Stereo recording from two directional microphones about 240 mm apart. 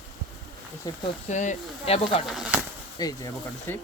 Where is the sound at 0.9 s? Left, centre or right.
Centre.